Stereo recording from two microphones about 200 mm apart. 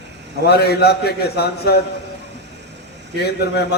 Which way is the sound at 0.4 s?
55° left (ahead or behind).